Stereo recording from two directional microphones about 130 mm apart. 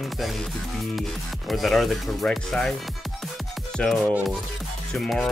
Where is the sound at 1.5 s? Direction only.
Centre (ahead or behind).